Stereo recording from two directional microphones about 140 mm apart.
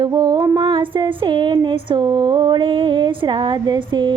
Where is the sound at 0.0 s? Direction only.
30° right (ahead or behind).